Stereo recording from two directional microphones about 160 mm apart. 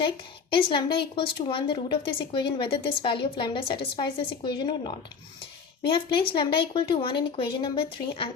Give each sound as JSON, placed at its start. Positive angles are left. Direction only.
{"t": 0.5, "sound": "a woman's voice", "side_deg": 30}